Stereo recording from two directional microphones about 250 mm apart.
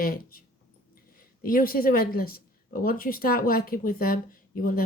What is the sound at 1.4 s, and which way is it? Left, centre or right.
Speech, left.